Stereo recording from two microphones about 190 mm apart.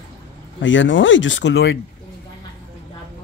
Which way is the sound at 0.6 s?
80° left.